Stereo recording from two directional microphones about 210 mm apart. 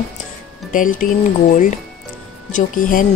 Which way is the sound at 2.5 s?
40° left (ahead or behind).